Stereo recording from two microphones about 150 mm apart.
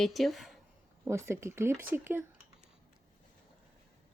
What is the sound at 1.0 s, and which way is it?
Speech, 15° right (ahead or behind).